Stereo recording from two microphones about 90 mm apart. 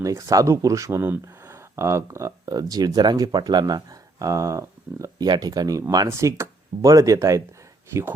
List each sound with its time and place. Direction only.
0.0 s speech: 35° right (ahead or behind)
5.1 s speech: 50° right (ahead or behind)
6.1 s speech: 35° right (ahead or behind)